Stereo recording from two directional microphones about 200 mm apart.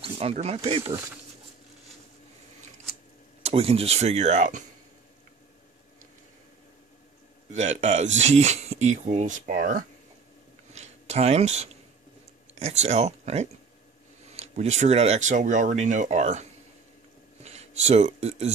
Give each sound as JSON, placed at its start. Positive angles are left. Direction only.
{"t": 0.0, "sound": "speech", "side_deg": -30}
{"t": 3.4, "sound": "speech", "side_deg": -30}
{"t": 7.5, "sound": "speech", "side_deg": -35}
{"t": 10.7, "sound": "a sound", "side_deg": -35}
{"t": 12.5, "sound": "speech", "side_deg": -35}
{"t": 17.4, "sound": "a sound", "side_deg": -35}